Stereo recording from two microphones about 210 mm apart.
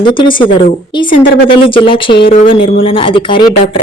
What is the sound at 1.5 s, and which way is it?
Speech, 25° left (ahead or behind).